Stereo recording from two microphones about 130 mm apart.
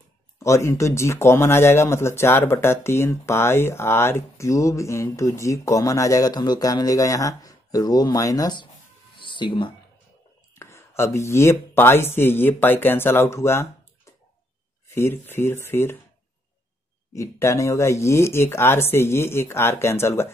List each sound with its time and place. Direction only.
0.4 s speech: 20° left (ahead or behind)
9.2 s a sound: 40° left (ahead or behind)
10.5 s speech: 20° left (ahead or behind)
15.0 s speech: 20° left (ahead or behind)
17.1 s speech: 25° left (ahead or behind)